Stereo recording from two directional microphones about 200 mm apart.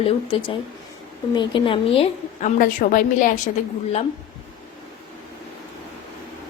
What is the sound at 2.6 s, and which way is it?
Speech, 45° left (ahead or behind).